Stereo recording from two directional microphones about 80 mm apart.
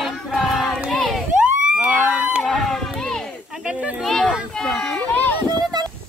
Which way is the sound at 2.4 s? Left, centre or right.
Centre.